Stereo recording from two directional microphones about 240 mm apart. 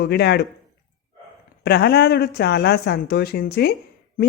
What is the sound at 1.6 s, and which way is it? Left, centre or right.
A woman's voice, left.